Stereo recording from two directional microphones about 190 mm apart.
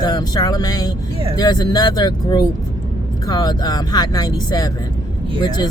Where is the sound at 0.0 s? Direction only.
20° left (ahead or behind).